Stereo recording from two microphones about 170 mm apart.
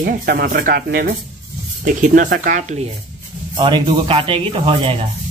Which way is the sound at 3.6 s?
30° right (ahead or behind).